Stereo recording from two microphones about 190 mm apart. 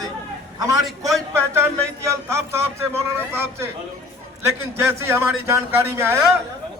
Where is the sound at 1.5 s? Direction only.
15° right (ahead or behind).